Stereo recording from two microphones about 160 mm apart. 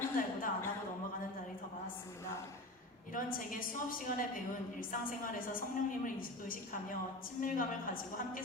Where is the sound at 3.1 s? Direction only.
60° left (ahead or behind).